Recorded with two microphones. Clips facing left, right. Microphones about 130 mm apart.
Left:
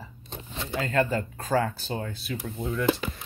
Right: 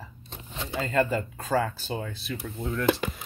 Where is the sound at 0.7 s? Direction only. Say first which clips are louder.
Even; centre (ahead or behind).